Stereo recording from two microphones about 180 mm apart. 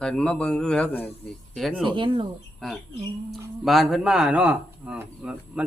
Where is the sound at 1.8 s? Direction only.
30° right (ahead or behind).